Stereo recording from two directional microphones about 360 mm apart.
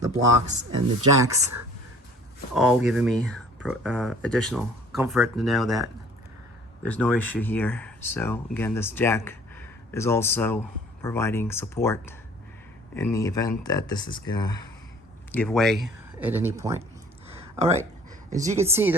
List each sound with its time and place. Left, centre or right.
0.0 s speech: right
1.2 s a woman's voice: centre
2.6 s speech: centre
18.3 s a woman's voice: centre